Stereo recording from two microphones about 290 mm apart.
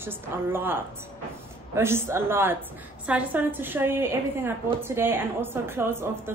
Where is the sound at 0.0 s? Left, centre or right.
Centre.